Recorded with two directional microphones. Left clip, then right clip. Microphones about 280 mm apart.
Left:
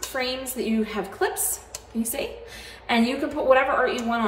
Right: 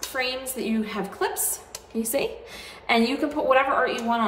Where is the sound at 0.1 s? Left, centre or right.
Centre.